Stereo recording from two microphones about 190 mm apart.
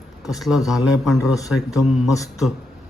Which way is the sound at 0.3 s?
Centre (ahead or behind).